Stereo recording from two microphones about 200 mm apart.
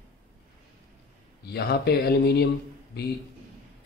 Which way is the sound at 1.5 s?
55° left (ahead or behind).